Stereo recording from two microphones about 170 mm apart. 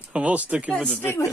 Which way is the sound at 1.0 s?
15° left (ahead or behind).